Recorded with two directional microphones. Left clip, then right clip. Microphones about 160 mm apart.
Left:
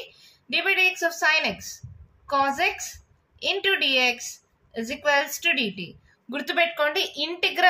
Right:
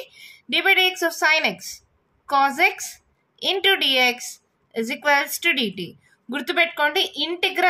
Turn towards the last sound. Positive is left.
turn(degrees=-35)  # may be behind; listen again after turning